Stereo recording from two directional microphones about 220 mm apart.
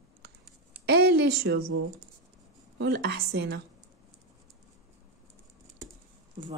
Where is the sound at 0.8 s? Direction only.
45° right (ahead or behind).